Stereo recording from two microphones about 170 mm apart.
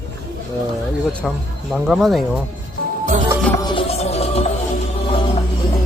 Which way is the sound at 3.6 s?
30° left (ahead or behind).